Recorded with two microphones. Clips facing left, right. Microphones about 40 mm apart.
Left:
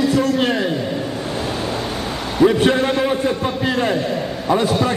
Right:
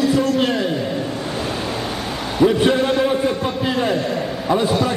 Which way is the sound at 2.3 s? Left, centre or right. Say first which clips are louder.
Left 1 dB; centre.